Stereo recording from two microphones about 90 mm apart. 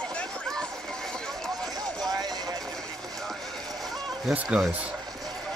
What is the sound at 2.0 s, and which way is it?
Vehicle, 50° right (ahead or behind).